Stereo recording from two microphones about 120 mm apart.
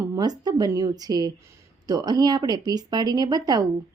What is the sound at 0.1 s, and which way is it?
Speech, 35° right (ahead or behind).